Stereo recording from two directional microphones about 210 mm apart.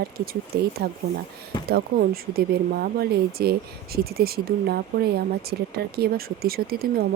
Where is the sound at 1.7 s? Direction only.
45° right (ahead or behind).